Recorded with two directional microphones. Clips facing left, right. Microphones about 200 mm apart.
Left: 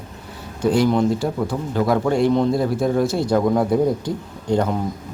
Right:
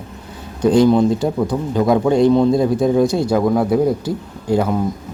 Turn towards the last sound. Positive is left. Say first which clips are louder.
# right 2 dB
turn(degrees=-5)  # may be behind; listen again after turning